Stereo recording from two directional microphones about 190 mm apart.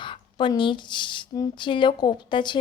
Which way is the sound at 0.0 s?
25° left (ahead or behind).